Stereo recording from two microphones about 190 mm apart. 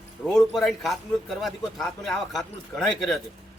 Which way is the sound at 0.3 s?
Centre (ahead or behind).